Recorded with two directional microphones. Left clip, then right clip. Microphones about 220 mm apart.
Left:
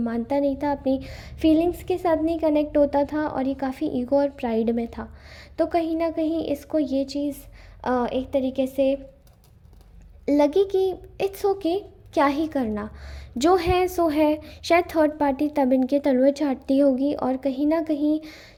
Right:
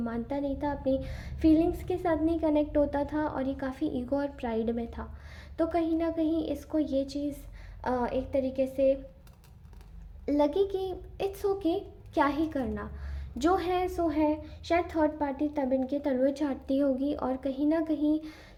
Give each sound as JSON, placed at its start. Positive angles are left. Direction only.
{"t": 0.0, "sound": "a woman's voice", "side_deg": 35}
{"t": 10.2, "sound": "a woman's voice", "side_deg": 35}